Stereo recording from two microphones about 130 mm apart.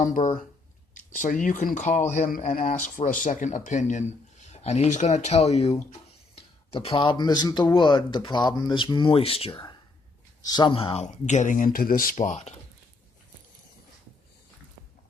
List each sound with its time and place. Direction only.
0.0 s speech: 75° left (ahead or behind); by 11.0 s 45° left (ahead or behind)
11.0 s speech: 65° left (ahead or behind)